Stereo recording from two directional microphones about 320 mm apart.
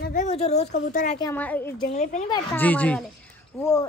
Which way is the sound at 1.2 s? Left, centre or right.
Centre.